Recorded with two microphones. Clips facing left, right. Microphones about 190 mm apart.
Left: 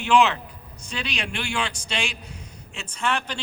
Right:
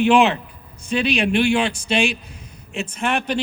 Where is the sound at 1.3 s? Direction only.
20° right (ahead or behind).